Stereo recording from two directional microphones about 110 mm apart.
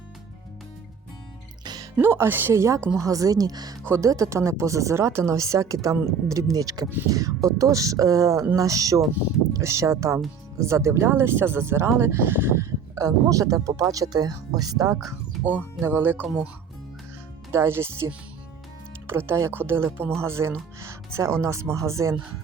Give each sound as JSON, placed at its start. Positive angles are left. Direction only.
{"t": 1.6, "sound": "music", "side_deg": -40}
{"t": 2.0, "sound": "speech", "side_deg": -20}
{"t": 15.8, "sound": "speech", "side_deg": -20}
{"t": 17.5, "sound": "speech", "side_deg": -25}